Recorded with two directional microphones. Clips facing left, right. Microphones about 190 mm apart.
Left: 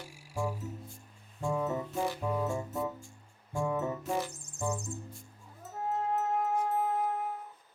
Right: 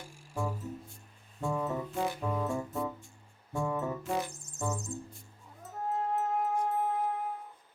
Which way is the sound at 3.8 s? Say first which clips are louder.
Left 1 dB; 20° left (ahead or behind).